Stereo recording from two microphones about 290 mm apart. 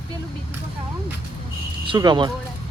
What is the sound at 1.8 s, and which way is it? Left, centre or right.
Speech, centre.